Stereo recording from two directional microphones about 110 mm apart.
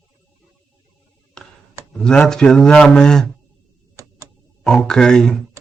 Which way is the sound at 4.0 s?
25° right (ahead or behind).